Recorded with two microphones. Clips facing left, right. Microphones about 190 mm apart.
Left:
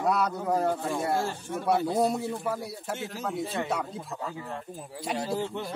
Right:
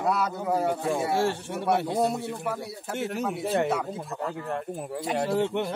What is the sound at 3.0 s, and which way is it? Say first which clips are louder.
Speech: right 7 dB; 60° right (ahead or behind).